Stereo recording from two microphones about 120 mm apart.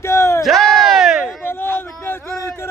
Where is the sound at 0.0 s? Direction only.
25° left (ahead or behind).